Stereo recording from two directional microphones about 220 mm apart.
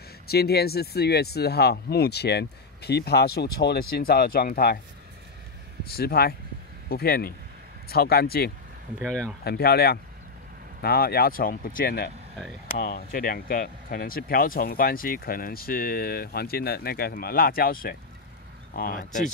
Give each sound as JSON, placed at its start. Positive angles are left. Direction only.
{"t": 0.3, "sound": "speech", "side_deg": 45}
{"t": 5.9, "sound": "speech", "side_deg": 45}
{"t": 9.0, "sound": "speech", "side_deg": 5}
{"t": 9.4, "sound": "speech", "side_deg": 45}